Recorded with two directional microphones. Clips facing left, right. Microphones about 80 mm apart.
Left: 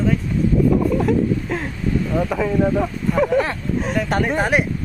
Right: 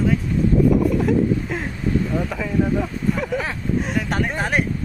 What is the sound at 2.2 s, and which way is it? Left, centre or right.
Speech, centre.